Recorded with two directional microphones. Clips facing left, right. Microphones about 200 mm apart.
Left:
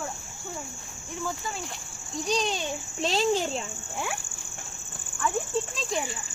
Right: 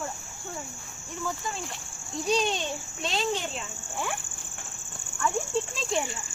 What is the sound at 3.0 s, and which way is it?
Speech, 35° left (ahead or behind).